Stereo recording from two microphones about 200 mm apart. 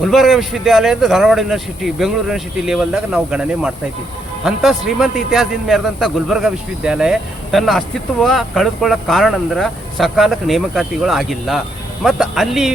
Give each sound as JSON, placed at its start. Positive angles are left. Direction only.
{"t": 0.0, "sound": "a man's voice", "side_deg": 0}